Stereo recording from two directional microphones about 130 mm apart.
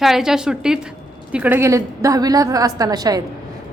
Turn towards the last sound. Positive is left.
turn(degrees=-30)  # may be behind; listen again after turning